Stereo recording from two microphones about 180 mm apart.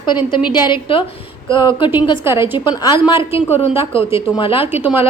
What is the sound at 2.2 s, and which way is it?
Speech, 15° right (ahead or behind).